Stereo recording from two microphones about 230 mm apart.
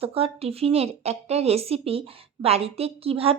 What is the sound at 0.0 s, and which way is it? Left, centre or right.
A woman's voice, right.